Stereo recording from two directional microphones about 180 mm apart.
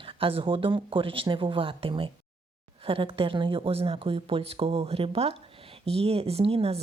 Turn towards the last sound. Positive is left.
turn(degrees=-35)  # may be behind; listen again after turning